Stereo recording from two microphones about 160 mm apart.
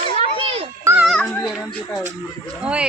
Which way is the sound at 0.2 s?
40° right (ahead or behind).